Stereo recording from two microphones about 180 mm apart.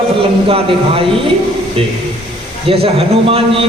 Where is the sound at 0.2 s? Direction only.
30° right (ahead or behind).